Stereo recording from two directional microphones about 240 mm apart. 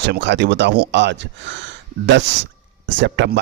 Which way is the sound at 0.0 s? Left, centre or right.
Right.